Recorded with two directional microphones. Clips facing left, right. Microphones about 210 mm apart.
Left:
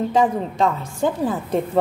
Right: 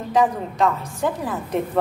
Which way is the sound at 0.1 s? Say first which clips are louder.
Left 1 dB; 25° left (ahead or behind).